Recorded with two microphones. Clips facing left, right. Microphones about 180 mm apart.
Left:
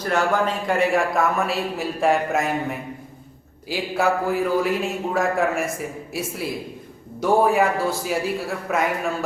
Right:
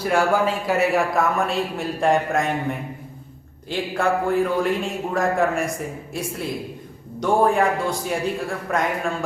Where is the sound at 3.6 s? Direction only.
5° left (ahead or behind).